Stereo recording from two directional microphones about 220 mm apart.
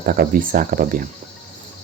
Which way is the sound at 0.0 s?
40° right (ahead or behind).